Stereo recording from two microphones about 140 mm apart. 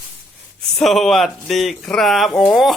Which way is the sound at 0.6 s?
Centre (ahead or behind).